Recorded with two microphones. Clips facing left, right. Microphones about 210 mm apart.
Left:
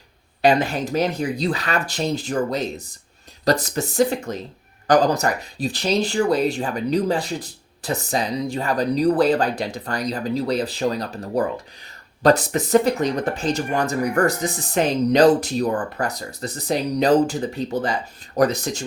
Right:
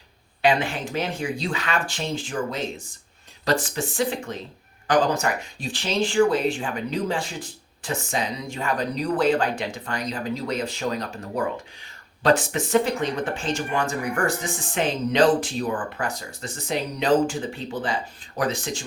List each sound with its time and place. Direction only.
0.4 s speech: 40° left (ahead or behind)